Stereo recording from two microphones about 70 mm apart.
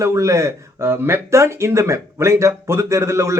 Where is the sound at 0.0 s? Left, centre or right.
Right.